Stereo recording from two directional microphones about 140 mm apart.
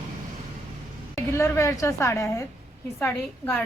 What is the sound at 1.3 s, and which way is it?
A woman's voice, 20° left (ahead or behind).